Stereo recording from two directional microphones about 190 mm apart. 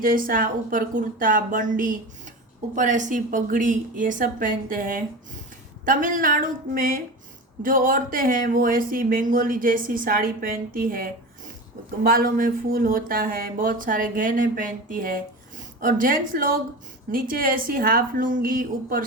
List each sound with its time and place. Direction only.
0.0 s speech: 45° right (ahead or behind)